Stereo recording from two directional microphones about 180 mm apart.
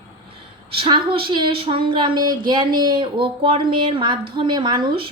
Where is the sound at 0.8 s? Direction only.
25° right (ahead or behind).